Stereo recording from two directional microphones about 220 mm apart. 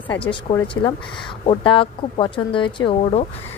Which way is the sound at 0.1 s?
20° left (ahead or behind).